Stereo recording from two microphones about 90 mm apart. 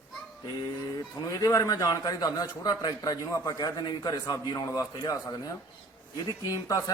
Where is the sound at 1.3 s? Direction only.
35° left (ahead or behind).